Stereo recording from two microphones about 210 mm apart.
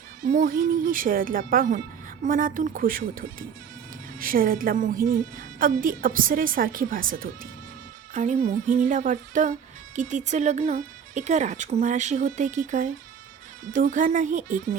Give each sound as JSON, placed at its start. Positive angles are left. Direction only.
{"t": 0.2, "sound": "speech", "side_deg": -40}